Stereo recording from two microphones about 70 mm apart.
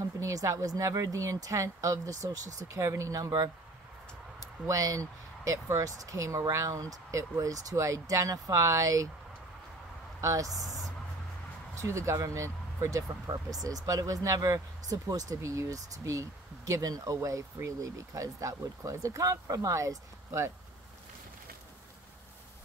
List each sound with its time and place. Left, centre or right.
0.2 s speech: right
4.6 s speech: right
10.2 s speech: right
11.8 s speech: right
13.3 s speech: right